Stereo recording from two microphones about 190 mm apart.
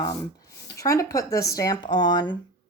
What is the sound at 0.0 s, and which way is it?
Speech, 15° left (ahead or behind).